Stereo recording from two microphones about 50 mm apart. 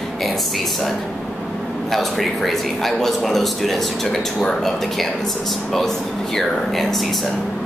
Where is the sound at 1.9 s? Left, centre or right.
Centre.